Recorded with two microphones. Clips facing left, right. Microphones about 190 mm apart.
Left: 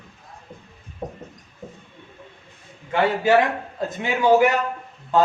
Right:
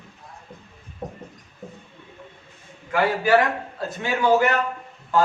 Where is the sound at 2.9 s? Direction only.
25° left (ahead or behind).